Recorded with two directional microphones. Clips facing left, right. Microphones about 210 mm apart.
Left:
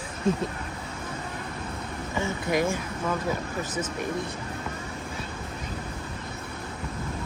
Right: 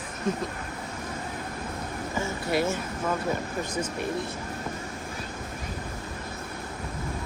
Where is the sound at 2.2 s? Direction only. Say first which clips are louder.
Left 1 dB; 15° left (ahead or behind).